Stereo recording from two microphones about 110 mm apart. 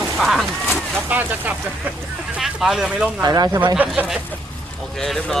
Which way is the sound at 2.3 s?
5° right (ahead or behind).